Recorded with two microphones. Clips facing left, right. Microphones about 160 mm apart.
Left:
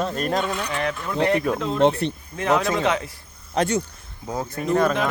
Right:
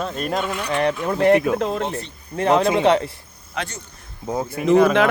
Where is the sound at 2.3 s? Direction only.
30° right (ahead or behind).